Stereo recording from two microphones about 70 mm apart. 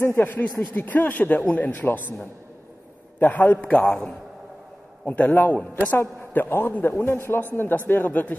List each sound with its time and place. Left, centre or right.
0.0 s speech: left
3.8 s a man's voice: centre